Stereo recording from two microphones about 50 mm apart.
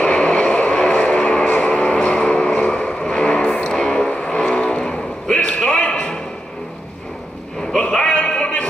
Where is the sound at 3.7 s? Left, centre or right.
Centre.